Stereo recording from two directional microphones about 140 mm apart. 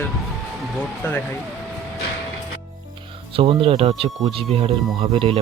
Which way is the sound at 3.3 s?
40° right (ahead or behind).